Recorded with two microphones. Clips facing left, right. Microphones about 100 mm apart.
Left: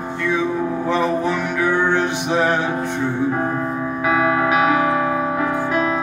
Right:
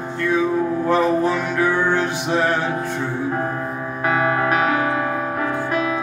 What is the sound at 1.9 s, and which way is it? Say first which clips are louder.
Music: left 1 dB; 20° left (ahead or behind).